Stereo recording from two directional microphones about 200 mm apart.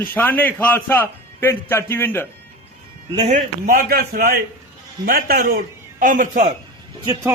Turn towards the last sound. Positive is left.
turn(degrees=-15)  # may be behind; listen again after turning